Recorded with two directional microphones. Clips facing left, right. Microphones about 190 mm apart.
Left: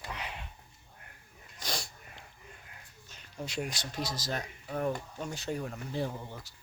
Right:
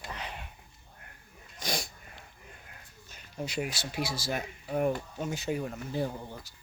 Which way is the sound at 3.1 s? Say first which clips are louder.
Right 3 dB; 5° right (ahead or behind).